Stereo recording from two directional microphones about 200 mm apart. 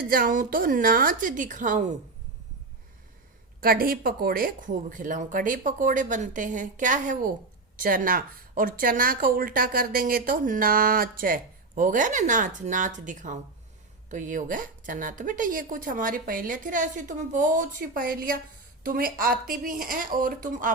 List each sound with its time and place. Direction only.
0.0 s speech: 45° right (ahead or behind)
3.6 s a woman's voice: 45° right (ahead or behind)